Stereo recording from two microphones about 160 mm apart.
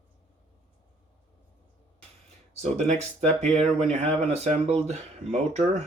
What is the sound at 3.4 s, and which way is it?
Speech, 40° right (ahead or behind).